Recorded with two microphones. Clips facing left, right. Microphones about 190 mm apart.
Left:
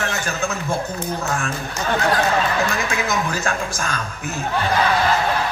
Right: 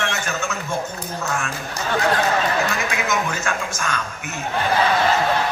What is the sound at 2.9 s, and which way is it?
A man's voice, 35° left (ahead or behind).